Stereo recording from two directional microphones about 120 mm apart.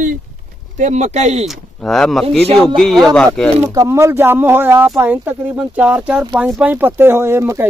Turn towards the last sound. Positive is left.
turn(degrees=-20)  # may be behind; listen again after turning